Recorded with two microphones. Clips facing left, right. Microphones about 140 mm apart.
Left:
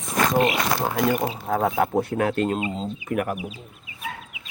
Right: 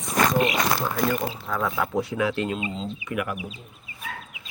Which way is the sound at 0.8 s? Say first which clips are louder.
Left 3 dB; 65° left (ahead or behind).